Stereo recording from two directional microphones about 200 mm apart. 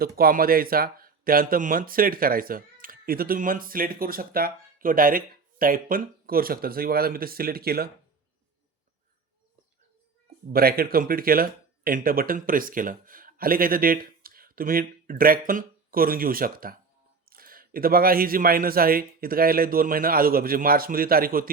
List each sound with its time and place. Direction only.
0.2 s speech: 50° right (ahead or behind)
10.5 s speech: 50° right (ahead or behind)